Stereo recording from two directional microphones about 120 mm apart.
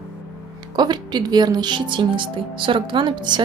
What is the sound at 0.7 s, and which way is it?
Speech, 35° right (ahead or behind).